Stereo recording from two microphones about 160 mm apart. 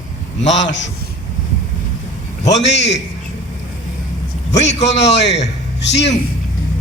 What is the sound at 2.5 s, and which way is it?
Speech, 90° left.